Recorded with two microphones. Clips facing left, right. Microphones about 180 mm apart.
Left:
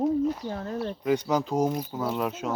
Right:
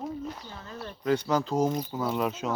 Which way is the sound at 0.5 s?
60° left (ahead or behind).